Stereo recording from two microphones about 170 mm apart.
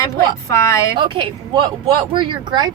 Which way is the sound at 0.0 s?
15° left (ahead or behind).